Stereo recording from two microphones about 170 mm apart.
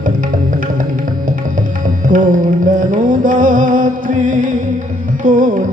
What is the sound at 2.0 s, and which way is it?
Music, 50° right (ahead or behind).